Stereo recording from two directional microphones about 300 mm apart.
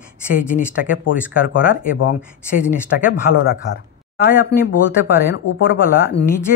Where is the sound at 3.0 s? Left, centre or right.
Left.